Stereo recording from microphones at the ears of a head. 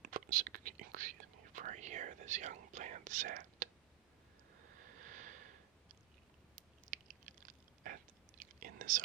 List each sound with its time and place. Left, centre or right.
0.0 s whispering: right
4.6 s a sound: right
6.6 s chewing: right